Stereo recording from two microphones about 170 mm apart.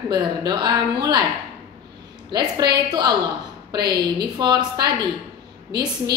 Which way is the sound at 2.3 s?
25° right (ahead or behind).